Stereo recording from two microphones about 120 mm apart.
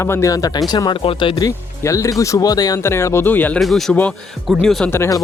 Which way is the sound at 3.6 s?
Centre (ahead or behind).